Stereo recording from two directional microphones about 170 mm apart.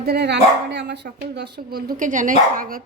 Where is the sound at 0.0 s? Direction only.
70° right (ahead or behind).